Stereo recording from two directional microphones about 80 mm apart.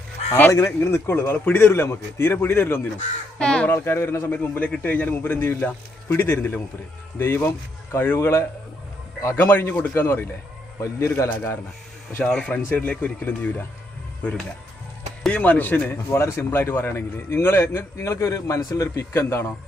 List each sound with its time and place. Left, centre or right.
0.5 s a man's voice: left
3.3 s speech: centre
3.7 s a man's voice: left
12.3 s a man's voice: centre
15.9 s speech: left